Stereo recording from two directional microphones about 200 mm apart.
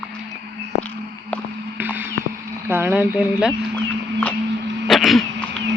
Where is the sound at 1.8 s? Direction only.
10° right (ahead or behind).